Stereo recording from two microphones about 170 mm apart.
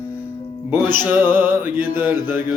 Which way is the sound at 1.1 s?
10° right (ahead or behind).